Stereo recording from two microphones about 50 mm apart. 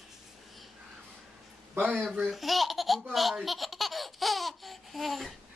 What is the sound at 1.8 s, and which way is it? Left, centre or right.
Speech, right.